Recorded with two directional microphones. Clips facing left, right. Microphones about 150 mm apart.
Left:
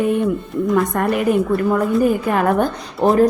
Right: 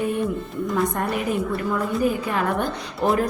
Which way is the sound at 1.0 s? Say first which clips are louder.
Left 6 dB; 70° left (ahead or behind).